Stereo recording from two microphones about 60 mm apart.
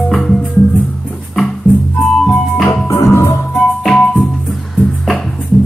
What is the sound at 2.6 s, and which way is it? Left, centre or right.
Music, centre.